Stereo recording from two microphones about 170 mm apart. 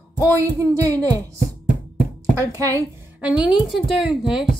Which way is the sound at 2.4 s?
20° right (ahead or behind).